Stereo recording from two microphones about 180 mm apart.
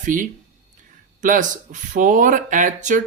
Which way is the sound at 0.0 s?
45° right (ahead or behind).